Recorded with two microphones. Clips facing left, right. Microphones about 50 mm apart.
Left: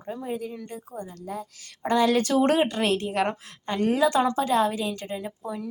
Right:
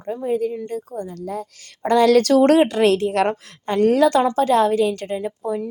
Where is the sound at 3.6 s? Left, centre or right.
Right.